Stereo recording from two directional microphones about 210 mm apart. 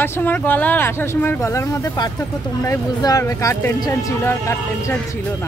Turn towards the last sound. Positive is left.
turn(degrees=10)  # may be behind; listen again after turning